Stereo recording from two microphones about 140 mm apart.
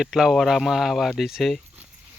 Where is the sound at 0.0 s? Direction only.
Centre (ahead or behind).